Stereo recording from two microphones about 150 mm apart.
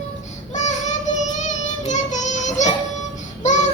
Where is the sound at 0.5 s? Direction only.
55° left (ahead or behind).